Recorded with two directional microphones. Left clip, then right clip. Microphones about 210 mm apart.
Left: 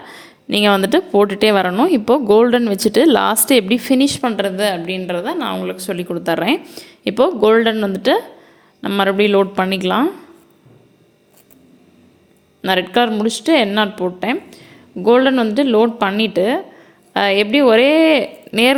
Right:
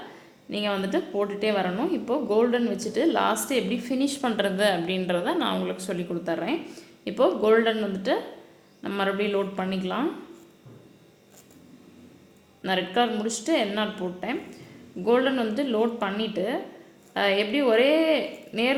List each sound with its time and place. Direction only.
0.4 s a woman's voice: 50° left (ahead or behind)
12.6 s a woman's voice: 45° left (ahead or behind)